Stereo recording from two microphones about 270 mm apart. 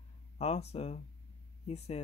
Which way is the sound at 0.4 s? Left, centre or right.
Left.